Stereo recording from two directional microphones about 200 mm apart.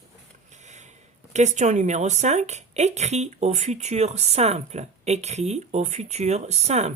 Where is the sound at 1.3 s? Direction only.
35° right (ahead or behind).